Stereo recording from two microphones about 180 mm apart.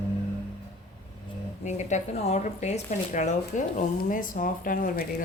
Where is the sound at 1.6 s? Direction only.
40° left (ahead or behind).